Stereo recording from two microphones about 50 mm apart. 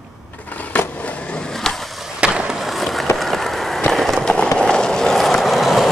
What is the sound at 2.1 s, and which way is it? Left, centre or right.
Skateboard, right.